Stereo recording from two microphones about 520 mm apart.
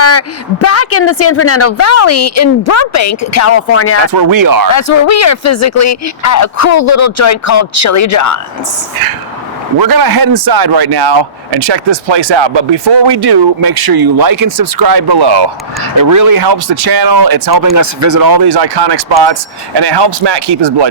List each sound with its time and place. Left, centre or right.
0.0 s a woman's voice: left
4.1 s speech: right
4.7 s speech: left
9.8 s speech: right
16.0 s speech: right